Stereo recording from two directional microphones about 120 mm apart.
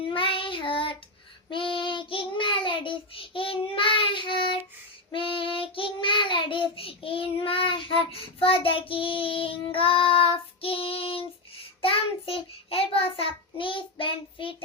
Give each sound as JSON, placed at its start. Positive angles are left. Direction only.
{"t": 0.1, "sound": "child singing", "side_deg": 45}